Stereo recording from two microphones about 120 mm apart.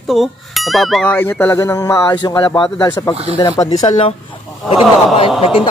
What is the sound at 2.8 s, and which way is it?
A man's voice, 30° left (ahead or behind).